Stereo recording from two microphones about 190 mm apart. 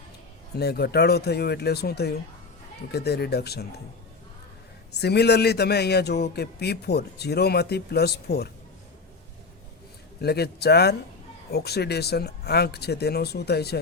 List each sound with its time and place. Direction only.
0.5 s a man's voice: 55° left (ahead or behind)
4.9 s a man's voice: 60° left (ahead or behind)
10.2 s a man's voice: 55° left (ahead or behind)